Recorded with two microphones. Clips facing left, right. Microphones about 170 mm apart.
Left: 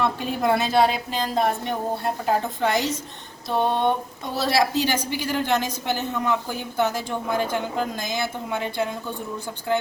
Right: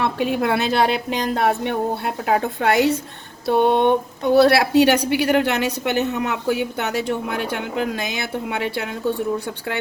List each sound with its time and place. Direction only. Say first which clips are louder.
0.0 s a woman's voice: right 3 dB; 70° right (ahead or behind)